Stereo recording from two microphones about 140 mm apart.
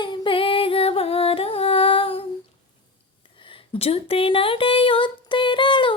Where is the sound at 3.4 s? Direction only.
40° left (ahead or behind).